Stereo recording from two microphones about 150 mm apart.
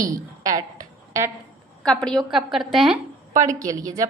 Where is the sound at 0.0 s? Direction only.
25° right (ahead or behind).